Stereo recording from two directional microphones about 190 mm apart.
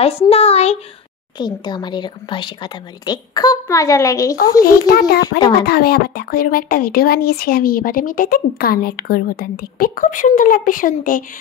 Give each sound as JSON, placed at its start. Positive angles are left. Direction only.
{"t": 0.0, "sound": "speech", "side_deg": 30}
{"t": 1.4, "sound": "a woman's voice", "side_deg": 25}
{"t": 4.6, "sound": "a child's voice", "side_deg": 55}